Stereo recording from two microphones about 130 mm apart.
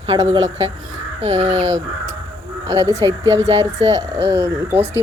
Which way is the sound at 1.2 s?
55° right (ahead or behind).